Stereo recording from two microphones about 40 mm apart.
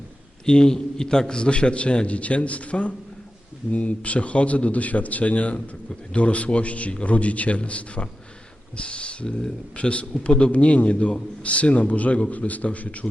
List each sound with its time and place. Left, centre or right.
0.4 s a man's voice: centre; by 13.1 s left